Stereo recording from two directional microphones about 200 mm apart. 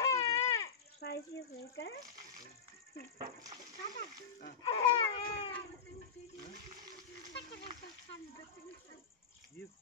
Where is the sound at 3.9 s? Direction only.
45° left (ahead or behind).